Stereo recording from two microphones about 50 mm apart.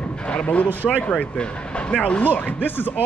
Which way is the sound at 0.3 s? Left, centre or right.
Left.